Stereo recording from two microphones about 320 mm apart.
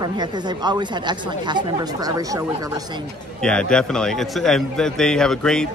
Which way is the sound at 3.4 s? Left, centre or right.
Centre.